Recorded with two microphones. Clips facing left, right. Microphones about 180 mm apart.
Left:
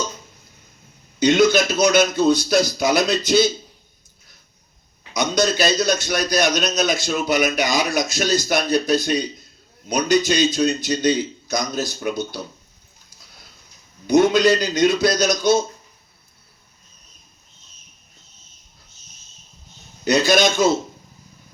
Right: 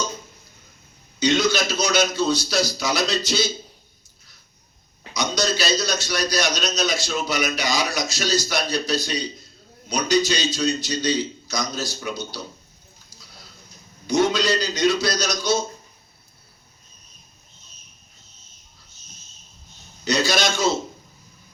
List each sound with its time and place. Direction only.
1.2 s a man's voice: 55° left (ahead or behind)
5.1 s a man's voice: 55° left (ahead or behind)
14.1 s a man's voice: 55° left (ahead or behind)
20.1 s a man's voice: 55° left (ahead or behind)